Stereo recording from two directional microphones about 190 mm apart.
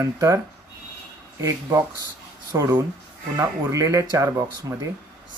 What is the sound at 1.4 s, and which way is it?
Speech, 15° right (ahead or behind).